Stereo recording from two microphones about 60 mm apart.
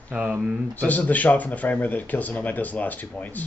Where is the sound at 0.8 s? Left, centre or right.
Left.